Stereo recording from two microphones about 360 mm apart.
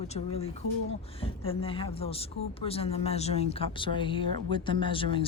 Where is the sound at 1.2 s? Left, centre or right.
Centre.